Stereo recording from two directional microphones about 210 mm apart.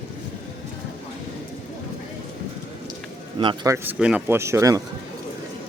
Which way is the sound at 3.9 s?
5° right (ahead or behind).